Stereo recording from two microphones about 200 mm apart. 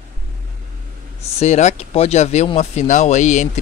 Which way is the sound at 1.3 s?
35° left (ahead or behind).